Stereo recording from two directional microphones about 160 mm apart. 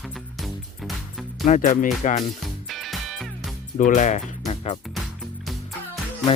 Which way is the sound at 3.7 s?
50° left (ahead or behind).